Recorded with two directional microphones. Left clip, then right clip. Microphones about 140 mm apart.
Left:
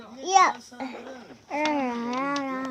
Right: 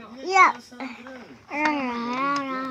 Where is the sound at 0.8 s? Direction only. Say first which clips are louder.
Even; 50° left (ahead or behind).